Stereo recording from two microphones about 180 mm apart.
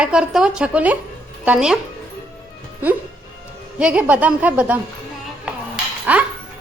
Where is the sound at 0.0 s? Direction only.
5° right (ahead or behind).